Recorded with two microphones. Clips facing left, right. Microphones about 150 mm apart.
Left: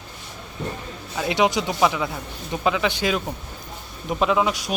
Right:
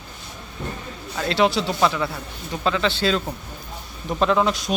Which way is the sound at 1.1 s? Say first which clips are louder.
Right 1 dB; 15° left (ahead or behind).